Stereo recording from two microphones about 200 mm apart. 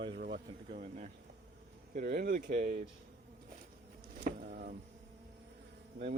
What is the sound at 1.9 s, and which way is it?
Speech, 50° right (ahead or behind).